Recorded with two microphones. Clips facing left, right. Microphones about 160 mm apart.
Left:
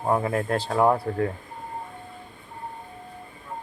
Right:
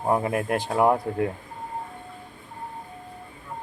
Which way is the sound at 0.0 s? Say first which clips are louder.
Even; 15° right (ahead or behind).